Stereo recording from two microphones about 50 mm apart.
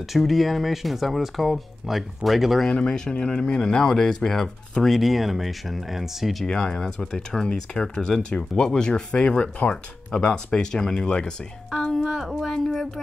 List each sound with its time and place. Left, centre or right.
0.0 s speech: centre
2.6 s speech: centre
4.9 s speech: centre
6.4 s speech: centre
11.7 s music: centre
12.1 s speech: centre